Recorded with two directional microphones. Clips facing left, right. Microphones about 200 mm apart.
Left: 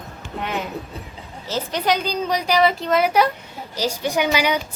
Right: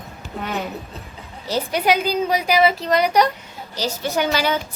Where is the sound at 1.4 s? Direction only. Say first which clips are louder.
Right 3 dB; 15° right (ahead or behind); by 4.6 s 15° left (ahead or behind).